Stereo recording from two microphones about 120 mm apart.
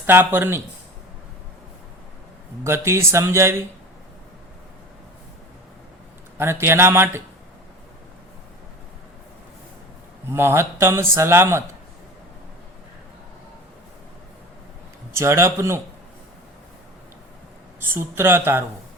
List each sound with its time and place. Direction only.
0.0 s speech: 15° right (ahead or behind)
2.6 s speech: 20° right (ahead or behind)
6.3 s speech: 20° right (ahead or behind)
10.2 s speech: 20° right (ahead or behind)
15.1 s speech: 20° right (ahead or behind)
17.7 s speech: 20° right (ahead or behind)